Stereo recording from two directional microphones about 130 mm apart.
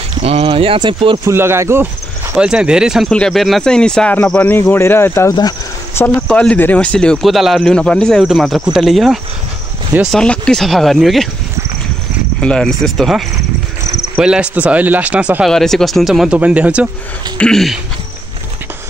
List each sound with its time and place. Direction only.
0.2 s speech: 50° right (ahead or behind)
1.1 s speech: 20° right (ahead or behind)
2.3 s speech: 5° right (ahead or behind)
12.4 s speech: 5° left (ahead or behind); by 15.4 s 10° right (ahead or behind)
15.4 s speech: 5° left (ahead or behind)
17.4 s speech: 5° left (ahead or behind)